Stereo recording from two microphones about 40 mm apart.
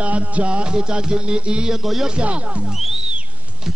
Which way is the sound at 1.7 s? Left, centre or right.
Centre.